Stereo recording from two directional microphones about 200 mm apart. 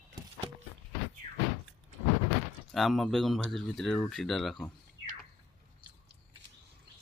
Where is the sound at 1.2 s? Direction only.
35° right (ahead or behind).